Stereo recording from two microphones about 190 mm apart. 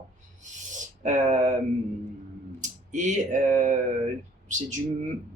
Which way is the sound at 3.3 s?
40° right (ahead or behind).